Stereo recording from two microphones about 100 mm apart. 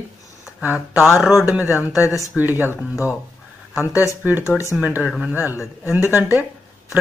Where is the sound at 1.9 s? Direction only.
30° left (ahead or behind).